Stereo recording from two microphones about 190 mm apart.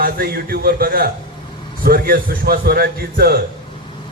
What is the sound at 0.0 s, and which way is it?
A man's voice, 50° right (ahead or behind).